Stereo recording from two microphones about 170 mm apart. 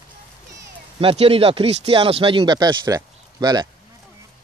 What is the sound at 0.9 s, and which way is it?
Speech, 35° right (ahead or behind).